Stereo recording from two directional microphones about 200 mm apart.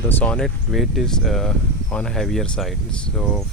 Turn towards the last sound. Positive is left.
turn(degrees=0)  # may be behind; listen again after turning